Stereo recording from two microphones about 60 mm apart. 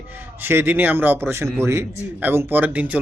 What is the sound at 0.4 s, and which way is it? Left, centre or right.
A man's voice, right.